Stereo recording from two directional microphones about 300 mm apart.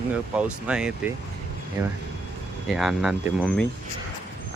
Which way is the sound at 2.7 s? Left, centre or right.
Centre.